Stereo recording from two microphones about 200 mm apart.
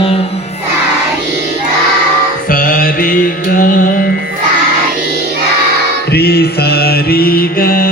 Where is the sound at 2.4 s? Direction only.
45° left (ahead or behind).